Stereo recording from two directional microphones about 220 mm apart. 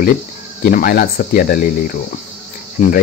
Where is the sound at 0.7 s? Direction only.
40° left (ahead or behind).